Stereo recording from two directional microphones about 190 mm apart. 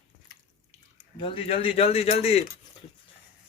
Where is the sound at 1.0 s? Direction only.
30° left (ahead or behind).